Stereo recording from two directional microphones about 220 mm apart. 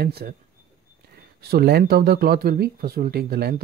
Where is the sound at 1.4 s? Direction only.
45° right (ahead or behind).